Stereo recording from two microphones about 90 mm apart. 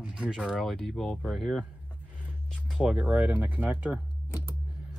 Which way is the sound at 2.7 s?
5° right (ahead or behind).